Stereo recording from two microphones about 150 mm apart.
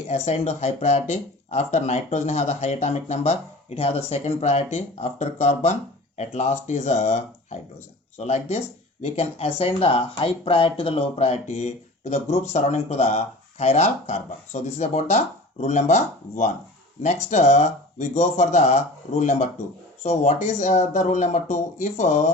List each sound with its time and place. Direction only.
0.1 s speech: 50° left (ahead or behind)